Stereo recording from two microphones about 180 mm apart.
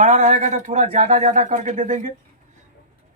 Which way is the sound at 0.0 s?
45° right (ahead or behind).